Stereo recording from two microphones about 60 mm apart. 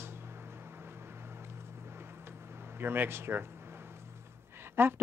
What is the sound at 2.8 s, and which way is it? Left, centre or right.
Speech, right.